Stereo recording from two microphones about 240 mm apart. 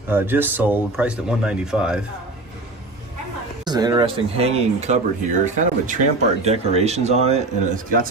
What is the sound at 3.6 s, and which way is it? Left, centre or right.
Speech, centre.